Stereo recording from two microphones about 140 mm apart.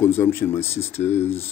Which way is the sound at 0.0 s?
15° left (ahead or behind).